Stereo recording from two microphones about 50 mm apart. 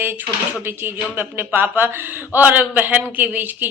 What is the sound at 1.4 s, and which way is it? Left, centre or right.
A man's voice, right.